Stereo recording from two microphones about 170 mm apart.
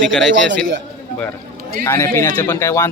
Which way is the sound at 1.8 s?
15° left (ahead or behind).